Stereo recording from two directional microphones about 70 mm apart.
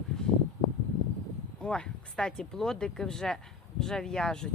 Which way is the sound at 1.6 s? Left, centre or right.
Centre.